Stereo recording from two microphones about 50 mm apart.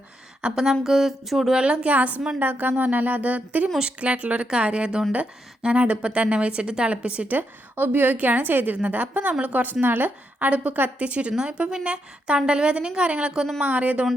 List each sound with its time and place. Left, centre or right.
0.4 s speech: centre
1.5 s a woman's voice: right
7.3 s a woman's voice: right
13.6 s speech: right